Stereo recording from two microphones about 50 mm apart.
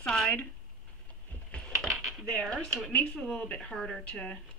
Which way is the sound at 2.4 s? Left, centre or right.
Centre.